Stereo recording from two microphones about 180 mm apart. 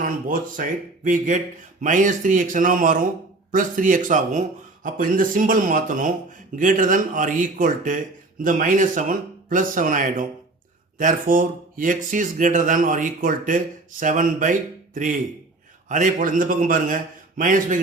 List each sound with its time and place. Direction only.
0.0 s speech: 50° right (ahead or behind)